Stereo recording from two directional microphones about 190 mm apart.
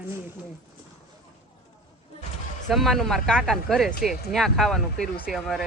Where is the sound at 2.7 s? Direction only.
Centre (ahead or behind).